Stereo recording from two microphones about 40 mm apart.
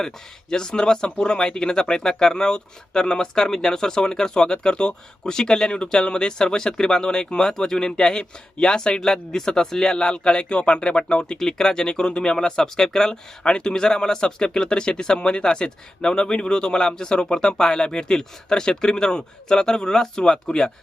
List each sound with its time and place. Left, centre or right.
0.5 s speech: centre
11.3 s speech: centre